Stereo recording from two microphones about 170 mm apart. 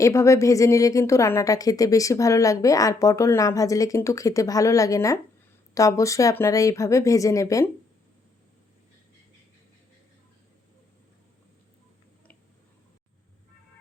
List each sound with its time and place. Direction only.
0.0 s a woman's voice: 15° left (ahead or behind)